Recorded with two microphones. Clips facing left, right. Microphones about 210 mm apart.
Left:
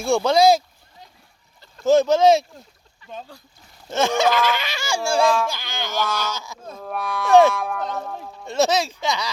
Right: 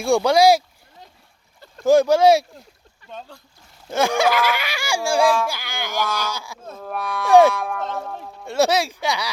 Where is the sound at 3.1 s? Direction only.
Centre (ahead or behind).